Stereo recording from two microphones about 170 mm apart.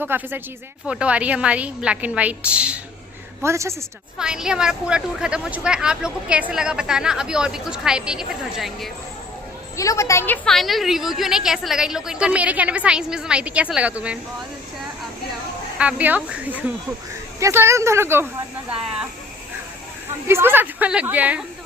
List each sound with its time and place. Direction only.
0.0 s a woman's voice: 10° right (ahead or behind)
4.2 s a woman's voice: 5° right (ahead or behind)
9.7 s a woman's voice: 20° left (ahead or behind); by 14.2 s 5° right (ahead or behind)
15.8 s a woman's voice: 10° right (ahead or behind)
20.2 s a woman's voice: 15° right (ahead or behind)